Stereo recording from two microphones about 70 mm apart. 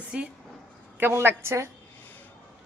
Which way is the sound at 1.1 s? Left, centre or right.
Right.